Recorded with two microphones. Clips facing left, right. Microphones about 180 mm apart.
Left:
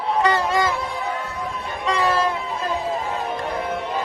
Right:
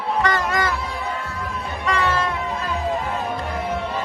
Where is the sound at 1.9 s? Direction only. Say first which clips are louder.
Left 2 dB; 35° left (ahead or behind).